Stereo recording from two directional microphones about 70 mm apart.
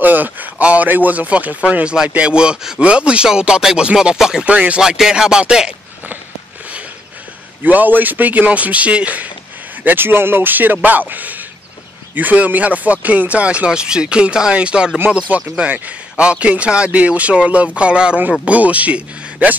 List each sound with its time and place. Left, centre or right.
0.0 s speech: right
7.6 s speech: right
9.8 s speech: right